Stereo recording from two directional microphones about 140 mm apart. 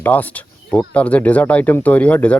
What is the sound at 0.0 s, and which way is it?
Speech, 10° left (ahead or behind).